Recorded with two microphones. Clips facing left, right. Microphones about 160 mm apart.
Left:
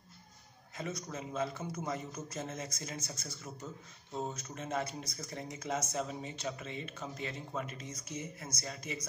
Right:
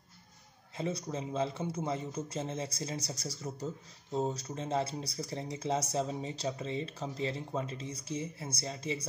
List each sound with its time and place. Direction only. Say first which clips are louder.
0.7 s speech: right 5 dB; 30° right (ahead or behind)